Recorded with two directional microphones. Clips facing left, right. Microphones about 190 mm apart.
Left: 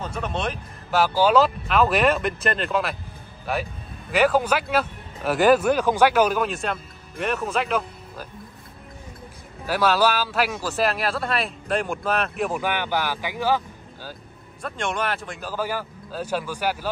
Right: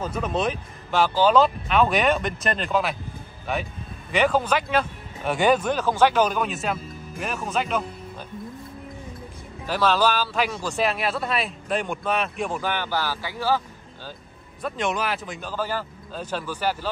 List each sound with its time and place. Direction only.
0.0 s speech: centre (ahead or behind)
4.1 s speech: 5° left (ahead or behind)
9.7 s speech: 10° left (ahead or behind)
14.6 s speech: 5° right (ahead or behind)
15.5 s a man's voice: 10° left (ahead or behind)